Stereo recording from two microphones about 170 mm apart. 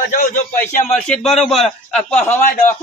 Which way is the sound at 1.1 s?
Centre (ahead or behind).